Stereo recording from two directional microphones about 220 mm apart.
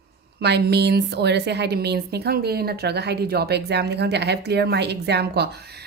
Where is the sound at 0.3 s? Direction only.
50° right (ahead or behind).